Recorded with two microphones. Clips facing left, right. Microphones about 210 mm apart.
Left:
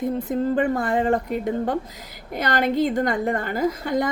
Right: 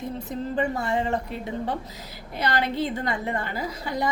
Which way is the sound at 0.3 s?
55° left (ahead or behind).